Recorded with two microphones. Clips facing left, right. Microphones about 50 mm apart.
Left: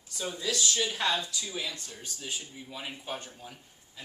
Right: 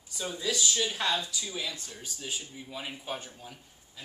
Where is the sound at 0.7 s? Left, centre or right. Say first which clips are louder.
Even; centre.